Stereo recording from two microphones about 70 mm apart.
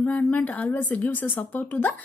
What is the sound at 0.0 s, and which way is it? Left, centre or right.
A woman's voice, left.